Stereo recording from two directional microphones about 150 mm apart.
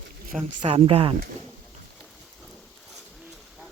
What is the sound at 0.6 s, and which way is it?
Speech, 40° right (ahead or behind).